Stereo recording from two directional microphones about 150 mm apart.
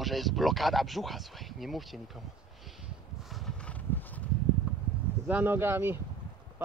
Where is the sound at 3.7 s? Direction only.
10° left (ahead or behind).